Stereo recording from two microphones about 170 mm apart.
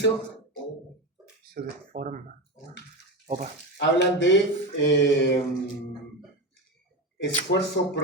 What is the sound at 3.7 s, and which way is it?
Speech, 90° left.